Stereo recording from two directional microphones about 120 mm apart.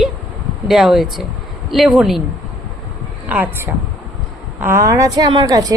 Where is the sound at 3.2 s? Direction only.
15° right (ahead or behind); by 5.7 s 30° right (ahead or behind).